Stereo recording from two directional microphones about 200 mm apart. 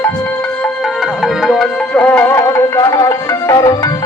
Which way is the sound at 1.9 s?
5° left (ahead or behind).